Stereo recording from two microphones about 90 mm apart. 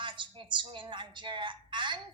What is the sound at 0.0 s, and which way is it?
A woman's voice, 60° right (ahead or behind).